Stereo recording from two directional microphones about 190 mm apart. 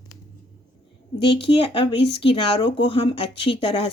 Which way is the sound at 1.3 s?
30° left (ahead or behind).